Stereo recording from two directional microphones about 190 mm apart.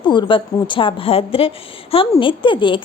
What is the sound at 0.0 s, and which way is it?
A woman's voice, 25° left (ahead or behind).